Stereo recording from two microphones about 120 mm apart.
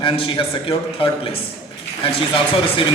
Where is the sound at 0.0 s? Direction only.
45° left (ahead or behind).